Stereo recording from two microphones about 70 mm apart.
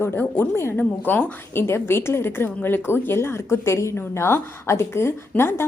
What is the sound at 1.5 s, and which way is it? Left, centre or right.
A woman's voice, left.